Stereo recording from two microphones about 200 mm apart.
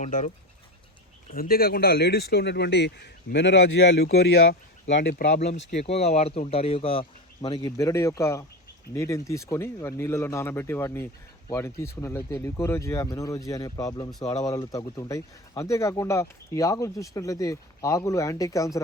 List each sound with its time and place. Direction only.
0.0 s speech: 35° left (ahead or behind)
1.3 s speech: 45° left (ahead or behind)
5.8 s speech: 30° left (ahead or behind); by 18.8 s 15° left (ahead or behind)